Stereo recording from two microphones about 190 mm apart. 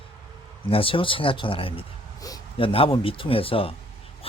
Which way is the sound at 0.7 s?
30° left (ahead or behind).